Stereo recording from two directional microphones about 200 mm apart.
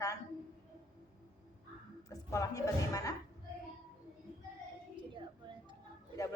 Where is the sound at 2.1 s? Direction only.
15° left (ahead or behind).